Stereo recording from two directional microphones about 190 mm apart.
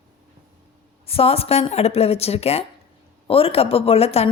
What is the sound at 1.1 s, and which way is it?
Speech, 30° left (ahead or behind).